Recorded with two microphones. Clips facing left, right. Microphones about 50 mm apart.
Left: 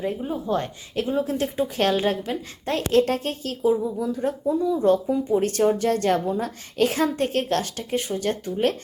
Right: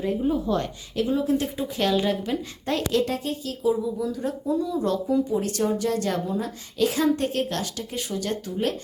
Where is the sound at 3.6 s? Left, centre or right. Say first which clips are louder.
Left 2 dB; left.